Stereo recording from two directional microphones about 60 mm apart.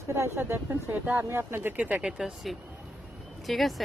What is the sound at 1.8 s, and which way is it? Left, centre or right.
Speech, right.